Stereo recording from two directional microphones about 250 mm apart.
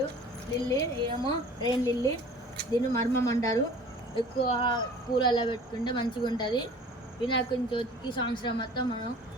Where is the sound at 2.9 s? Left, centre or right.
Centre.